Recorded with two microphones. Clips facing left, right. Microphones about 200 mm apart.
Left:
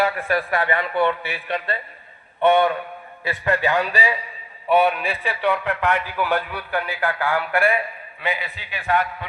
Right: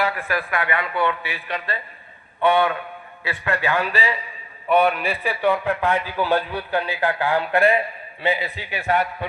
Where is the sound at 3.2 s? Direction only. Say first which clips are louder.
Left 2 dB; 20° left (ahead or behind).